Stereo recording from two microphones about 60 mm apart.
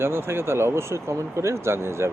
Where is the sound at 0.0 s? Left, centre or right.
Right.